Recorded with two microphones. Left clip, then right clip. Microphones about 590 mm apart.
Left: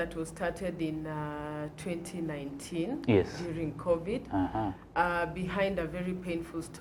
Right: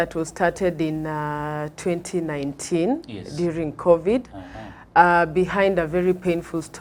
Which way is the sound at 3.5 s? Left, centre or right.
Right.